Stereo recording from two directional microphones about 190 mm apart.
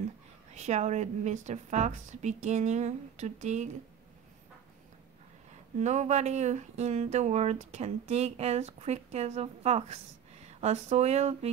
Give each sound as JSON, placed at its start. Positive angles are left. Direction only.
{"t": 0.6, "sound": "speech", "side_deg": -35}
{"t": 5.8, "sound": "speech", "side_deg": -40}